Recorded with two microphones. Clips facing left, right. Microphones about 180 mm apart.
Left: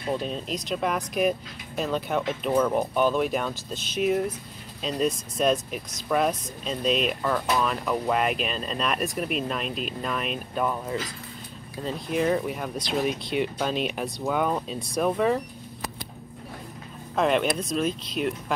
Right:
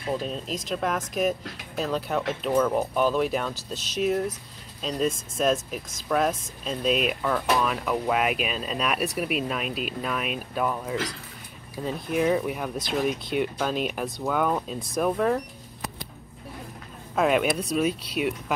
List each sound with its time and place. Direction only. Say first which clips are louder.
0.1 s speech: even; centre (ahead or behind)
12.8 s speech: even; 50° right (ahead or behind)
14.1 s speech: right 1 dB; 10° left (ahead or behind)
17.1 s speech: right 1 dB; 5° right (ahead or behind)